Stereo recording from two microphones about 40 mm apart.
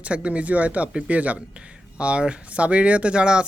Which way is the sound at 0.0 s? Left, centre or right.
Right.